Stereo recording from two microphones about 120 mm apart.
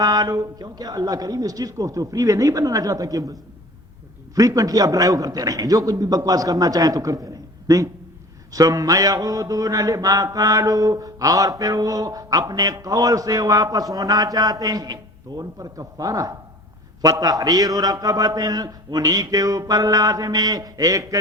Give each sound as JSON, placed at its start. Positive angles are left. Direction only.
{"t": 0.0, "sound": "mantra", "side_deg": -35}
{"t": 4.4, "sound": "mantra", "side_deg": -30}